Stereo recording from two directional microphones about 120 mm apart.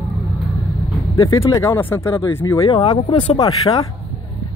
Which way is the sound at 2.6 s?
40° left (ahead or behind).